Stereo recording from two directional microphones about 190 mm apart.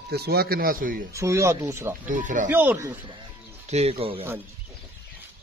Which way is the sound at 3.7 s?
30° right (ahead or behind).